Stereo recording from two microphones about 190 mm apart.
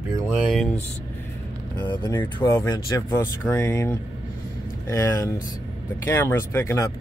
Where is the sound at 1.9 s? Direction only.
20° left (ahead or behind).